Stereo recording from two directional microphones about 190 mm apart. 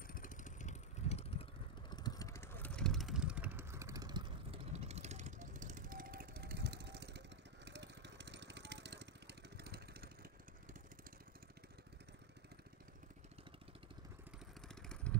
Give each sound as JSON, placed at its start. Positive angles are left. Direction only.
{"t": 0.0, "sound": "vehicle", "side_deg": 45}
{"t": 1.9, "sound": "vehicle", "side_deg": 20}
{"t": 14.8, "sound": "vehicle", "side_deg": 5}